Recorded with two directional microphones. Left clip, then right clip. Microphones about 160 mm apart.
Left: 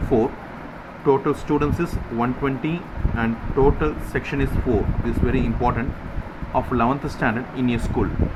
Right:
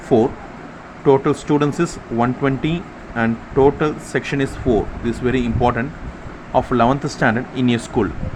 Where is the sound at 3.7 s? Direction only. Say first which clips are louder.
Right 4 dB; 35° right (ahead or behind).